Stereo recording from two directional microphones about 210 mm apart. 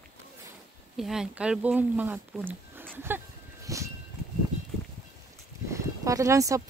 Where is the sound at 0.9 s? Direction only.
Centre (ahead or behind).